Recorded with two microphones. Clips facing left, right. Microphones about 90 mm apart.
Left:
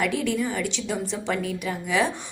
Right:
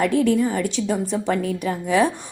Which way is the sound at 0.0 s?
40° right (ahead or behind).